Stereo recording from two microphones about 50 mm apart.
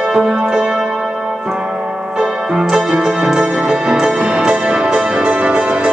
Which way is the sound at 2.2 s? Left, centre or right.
Centre.